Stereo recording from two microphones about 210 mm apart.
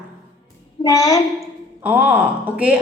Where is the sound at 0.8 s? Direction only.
15° left (ahead or behind).